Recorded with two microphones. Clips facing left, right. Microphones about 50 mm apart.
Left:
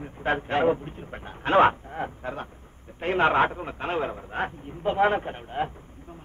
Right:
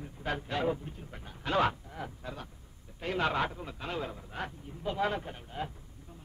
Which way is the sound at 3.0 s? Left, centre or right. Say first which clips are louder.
Left 9 dB; left.